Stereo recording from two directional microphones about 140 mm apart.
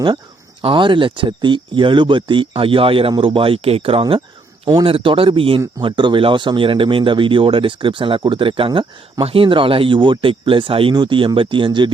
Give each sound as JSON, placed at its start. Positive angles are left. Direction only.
{"t": 0.6, "sound": "speech", "side_deg": -35}